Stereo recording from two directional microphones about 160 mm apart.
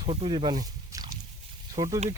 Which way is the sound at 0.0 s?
35° right (ahead or behind).